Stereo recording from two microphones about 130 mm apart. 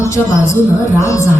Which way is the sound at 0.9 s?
25° left (ahead or behind).